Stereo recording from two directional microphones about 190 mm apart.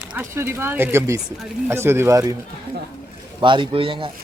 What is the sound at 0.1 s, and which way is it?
Speech, 10° right (ahead or behind).